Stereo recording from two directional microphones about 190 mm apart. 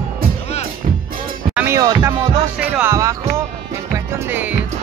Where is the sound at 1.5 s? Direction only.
15° right (ahead or behind).